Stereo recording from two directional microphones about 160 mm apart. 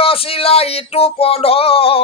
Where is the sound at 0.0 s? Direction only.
35° left (ahead or behind).